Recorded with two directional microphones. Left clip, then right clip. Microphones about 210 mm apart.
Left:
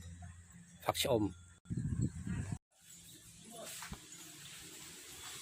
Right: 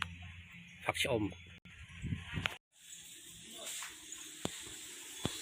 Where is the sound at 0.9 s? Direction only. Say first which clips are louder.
Left 1 dB; 20° left (ahead or behind).